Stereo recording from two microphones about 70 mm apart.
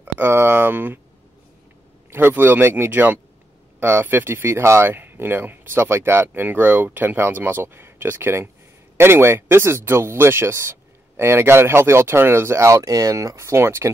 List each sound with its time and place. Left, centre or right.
0.0 s speech: right
2.0 s speech: right